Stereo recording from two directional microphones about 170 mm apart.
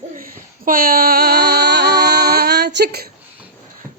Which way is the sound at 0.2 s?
55° right (ahead or behind).